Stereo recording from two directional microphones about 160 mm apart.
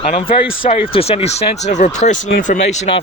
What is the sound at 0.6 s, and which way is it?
Speech, 35° left (ahead or behind).